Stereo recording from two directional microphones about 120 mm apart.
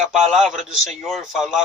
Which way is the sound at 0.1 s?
Centre (ahead or behind).